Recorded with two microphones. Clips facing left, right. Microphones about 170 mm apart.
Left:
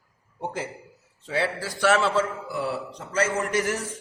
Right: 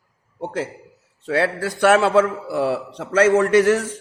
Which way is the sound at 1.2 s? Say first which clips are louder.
Right 6 dB; 65° right (ahead or behind).